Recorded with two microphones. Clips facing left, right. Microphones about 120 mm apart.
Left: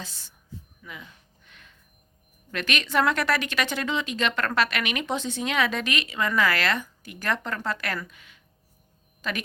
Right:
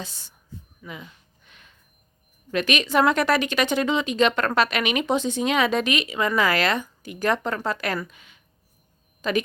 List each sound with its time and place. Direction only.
0.0 s a woman's voice: 15° right (ahead or behind)
1.5 s a sound: 20° right (ahead or behind)
2.5 s a woman's voice: 15° right (ahead or behind)